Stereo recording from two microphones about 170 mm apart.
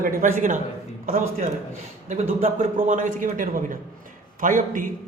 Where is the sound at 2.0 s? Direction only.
50° right (ahead or behind).